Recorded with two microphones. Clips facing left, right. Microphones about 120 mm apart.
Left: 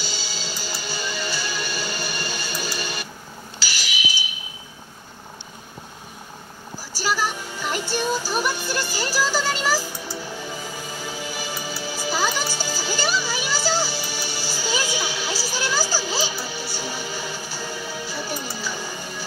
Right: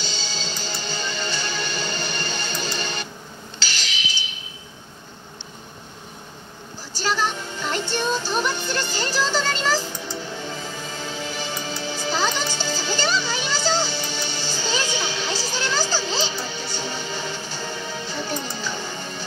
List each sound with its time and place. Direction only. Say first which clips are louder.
0.0 s music: right 1 dB; 10° left (ahead or behind)
3.5 s a sound: left 1 dB; 10° left (ahead or behind)
6.9 s music: right 1 dB; 10° left (ahead or behind)